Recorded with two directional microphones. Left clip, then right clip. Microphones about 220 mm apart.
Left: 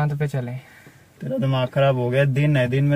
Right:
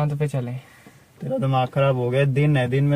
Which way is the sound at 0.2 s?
25° right (ahead or behind).